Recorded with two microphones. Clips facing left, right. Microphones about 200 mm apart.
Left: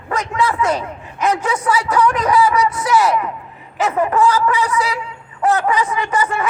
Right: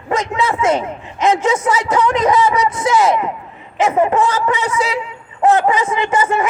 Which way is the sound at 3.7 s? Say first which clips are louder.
Right 2 dB; 25° right (ahead or behind).